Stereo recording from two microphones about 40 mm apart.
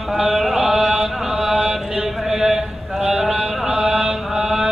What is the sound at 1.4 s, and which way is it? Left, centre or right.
Mantra, right.